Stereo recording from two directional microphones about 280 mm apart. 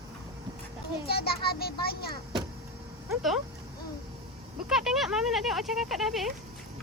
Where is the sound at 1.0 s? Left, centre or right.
Left.